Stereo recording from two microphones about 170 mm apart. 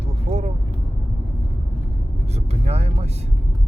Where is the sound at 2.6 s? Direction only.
40° right (ahead or behind).